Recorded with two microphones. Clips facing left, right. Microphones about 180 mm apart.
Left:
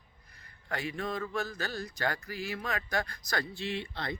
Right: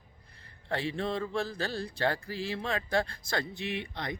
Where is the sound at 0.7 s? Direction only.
30° right (ahead or behind).